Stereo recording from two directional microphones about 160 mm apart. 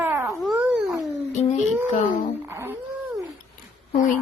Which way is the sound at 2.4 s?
15° right (ahead or behind).